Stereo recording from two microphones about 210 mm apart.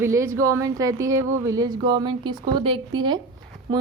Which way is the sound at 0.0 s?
15° right (ahead or behind).